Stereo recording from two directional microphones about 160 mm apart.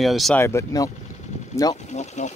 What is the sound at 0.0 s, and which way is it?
Speech, centre (ahead or behind).